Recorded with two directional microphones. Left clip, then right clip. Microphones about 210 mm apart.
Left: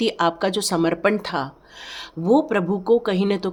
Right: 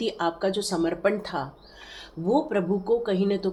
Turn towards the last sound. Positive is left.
turn(degrees=55)  # may be behind; listen again after turning